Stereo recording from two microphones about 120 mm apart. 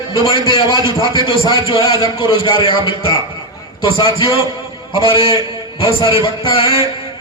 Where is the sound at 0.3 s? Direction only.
45° left (ahead or behind).